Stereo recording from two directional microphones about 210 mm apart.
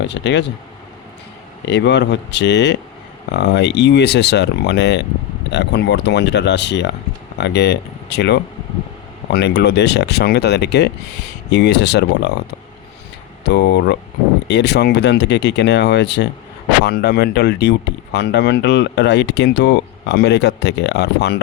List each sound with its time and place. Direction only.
0.1 s speech: 55° left (ahead or behind)
1.6 s speech: 55° left (ahead or behind)
13.5 s speech: 50° left (ahead or behind)